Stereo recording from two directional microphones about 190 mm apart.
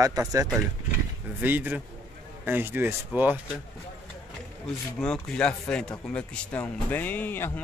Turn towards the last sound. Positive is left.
turn(degrees=10)  # may be behind; listen again after turning